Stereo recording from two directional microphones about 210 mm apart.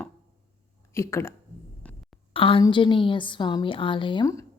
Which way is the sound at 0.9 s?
15° left (ahead or behind).